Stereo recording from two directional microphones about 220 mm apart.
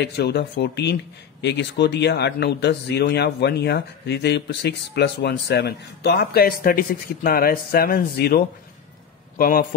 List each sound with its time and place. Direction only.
0.0 s a man's voice: 50° left (ahead or behind)